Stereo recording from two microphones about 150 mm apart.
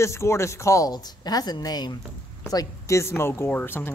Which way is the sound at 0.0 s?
20° left (ahead or behind).